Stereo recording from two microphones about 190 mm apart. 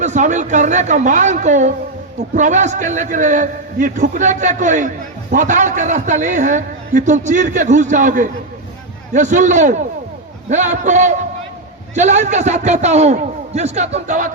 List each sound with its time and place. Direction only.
0.0 s a man's voice: 40° right (ahead or behind)